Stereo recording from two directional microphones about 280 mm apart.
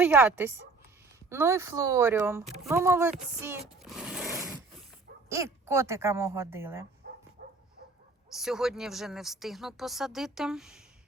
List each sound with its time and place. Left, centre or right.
0.0 s speech: centre
7.0 s dog: right
8.4 s speech: centre